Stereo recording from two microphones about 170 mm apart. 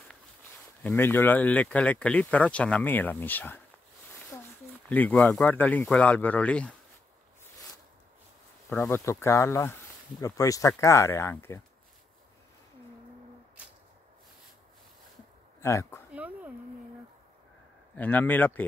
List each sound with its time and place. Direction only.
0.8 s speech: 15° left (ahead or behind)
4.8 s speech: 10° left (ahead or behind)
8.6 s speech: 10° left (ahead or behind)
15.6 s speech: 15° left (ahead or behind)
16.1 s a sound: 10° right (ahead or behind)
17.9 s speech: 10° left (ahead or behind)